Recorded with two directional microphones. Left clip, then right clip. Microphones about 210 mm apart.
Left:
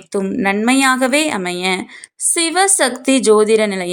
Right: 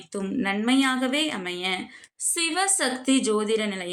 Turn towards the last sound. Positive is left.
turn(degrees=40)  # may be behind; listen again after turning